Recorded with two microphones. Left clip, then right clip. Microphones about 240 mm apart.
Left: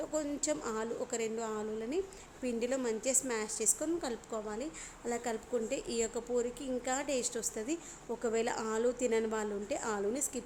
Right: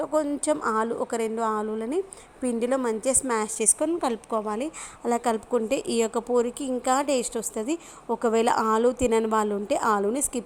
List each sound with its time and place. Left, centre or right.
0.0 s a woman's voice: right